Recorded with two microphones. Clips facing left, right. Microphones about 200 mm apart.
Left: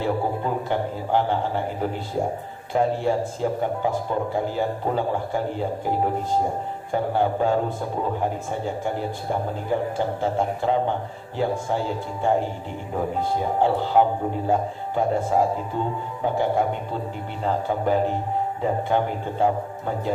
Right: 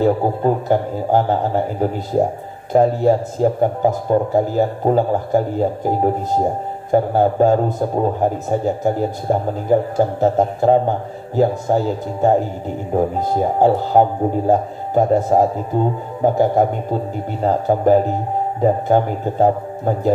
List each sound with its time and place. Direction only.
0.0 s a man's voice: 40° right (ahead or behind)